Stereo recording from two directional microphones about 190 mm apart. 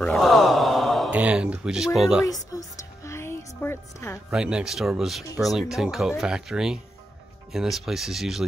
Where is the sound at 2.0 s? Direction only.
5° right (ahead or behind).